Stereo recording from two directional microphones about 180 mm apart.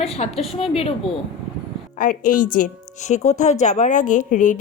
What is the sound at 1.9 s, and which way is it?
A woman's voice, 50° left (ahead or behind).